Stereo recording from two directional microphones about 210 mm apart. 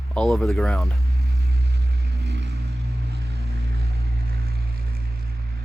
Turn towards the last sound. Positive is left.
turn(degrees=-45)  # may be behind; listen again after turning